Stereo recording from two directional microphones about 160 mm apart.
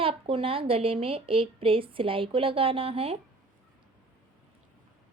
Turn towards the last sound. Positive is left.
turn(degrees=-35)  # may be behind; listen again after turning